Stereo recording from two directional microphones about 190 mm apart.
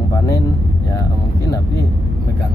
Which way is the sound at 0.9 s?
20° left (ahead or behind).